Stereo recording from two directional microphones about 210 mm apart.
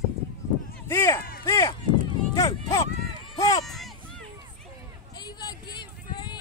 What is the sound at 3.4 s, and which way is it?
Run, 15° left (ahead or behind).